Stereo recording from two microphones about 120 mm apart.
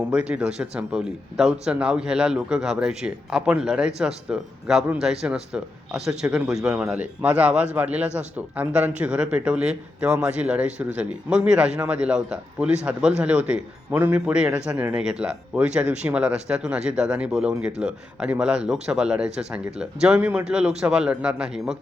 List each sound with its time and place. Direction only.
0.0 s speech: 10° right (ahead or behind)
14.3 s speech: 5° right (ahead or behind)